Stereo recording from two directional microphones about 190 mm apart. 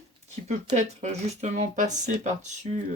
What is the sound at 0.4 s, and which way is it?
Speech, 40° right (ahead or behind).